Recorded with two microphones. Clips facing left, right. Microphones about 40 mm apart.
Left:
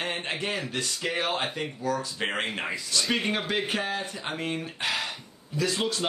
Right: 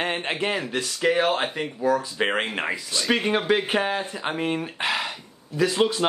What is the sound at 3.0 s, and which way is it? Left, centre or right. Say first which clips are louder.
Speech: right 5 dB; centre.